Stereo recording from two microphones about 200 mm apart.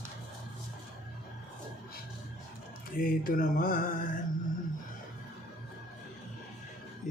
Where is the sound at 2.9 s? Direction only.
45° left (ahead or behind).